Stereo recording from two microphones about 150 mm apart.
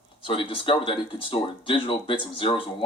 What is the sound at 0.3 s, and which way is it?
Speech, 35° left (ahead or behind).